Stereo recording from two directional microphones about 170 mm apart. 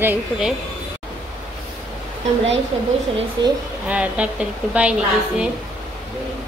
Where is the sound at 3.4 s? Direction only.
25° right (ahead or behind).